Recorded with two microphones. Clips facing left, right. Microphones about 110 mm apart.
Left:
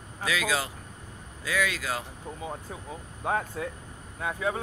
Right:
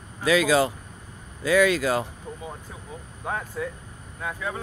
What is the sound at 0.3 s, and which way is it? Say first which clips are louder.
Speech: right 9 dB; 40° right (ahead or behind).